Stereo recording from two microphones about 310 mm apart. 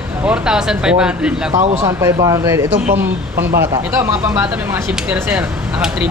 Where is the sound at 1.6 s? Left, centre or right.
Centre.